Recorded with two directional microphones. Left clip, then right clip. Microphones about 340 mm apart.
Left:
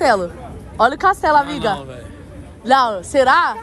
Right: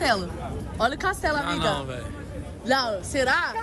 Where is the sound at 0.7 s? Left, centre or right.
Centre.